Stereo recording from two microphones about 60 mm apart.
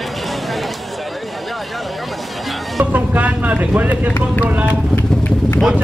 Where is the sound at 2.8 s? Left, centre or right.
Right.